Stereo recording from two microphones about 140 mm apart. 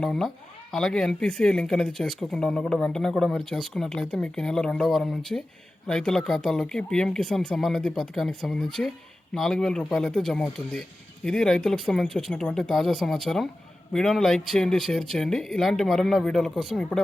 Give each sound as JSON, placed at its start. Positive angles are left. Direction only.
{"t": 0.0, "sound": "speech", "side_deg": 5}